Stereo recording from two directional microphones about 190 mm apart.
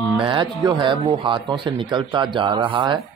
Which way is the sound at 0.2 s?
25° right (ahead or behind).